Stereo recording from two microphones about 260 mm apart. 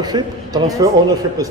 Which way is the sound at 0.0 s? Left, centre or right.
Centre.